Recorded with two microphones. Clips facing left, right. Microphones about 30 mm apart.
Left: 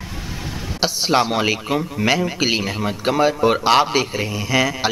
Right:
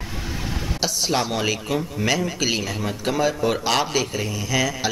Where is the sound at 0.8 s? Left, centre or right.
Left.